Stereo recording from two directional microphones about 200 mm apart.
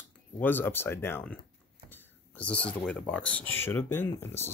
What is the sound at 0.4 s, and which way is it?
Speech, 10° left (ahead or behind).